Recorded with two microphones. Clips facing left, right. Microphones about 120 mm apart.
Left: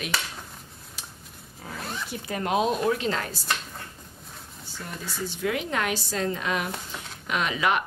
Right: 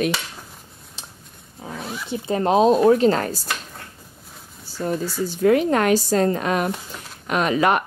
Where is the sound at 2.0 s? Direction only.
25° right (ahead or behind).